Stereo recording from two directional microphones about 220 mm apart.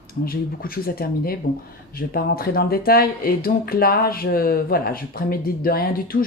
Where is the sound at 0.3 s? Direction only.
40° left (ahead or behind).